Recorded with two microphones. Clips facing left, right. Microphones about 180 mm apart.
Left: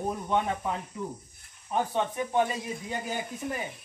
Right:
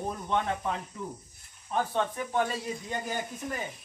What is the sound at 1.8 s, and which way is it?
Speech, 15° left (ahead or behind).